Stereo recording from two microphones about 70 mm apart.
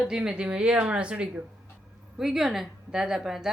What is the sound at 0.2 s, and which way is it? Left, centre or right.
Speech, centre.